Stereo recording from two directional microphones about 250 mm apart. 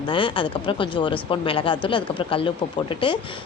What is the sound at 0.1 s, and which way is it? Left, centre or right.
Speech, centre.